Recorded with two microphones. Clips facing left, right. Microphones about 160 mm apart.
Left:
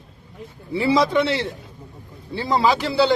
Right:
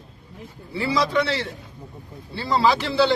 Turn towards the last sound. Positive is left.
turn(degrees=15)  # may be behind; listen again after turning